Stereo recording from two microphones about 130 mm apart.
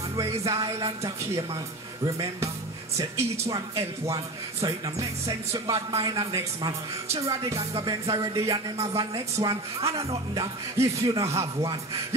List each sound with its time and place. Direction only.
0.1 s speech: 25° right (ahead or behind)